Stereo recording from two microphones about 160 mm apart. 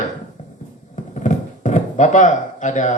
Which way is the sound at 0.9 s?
50° left (ahead or behind).